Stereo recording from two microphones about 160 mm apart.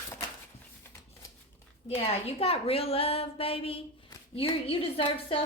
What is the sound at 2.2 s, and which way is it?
A woman's voice, 40° left (ahead or behind).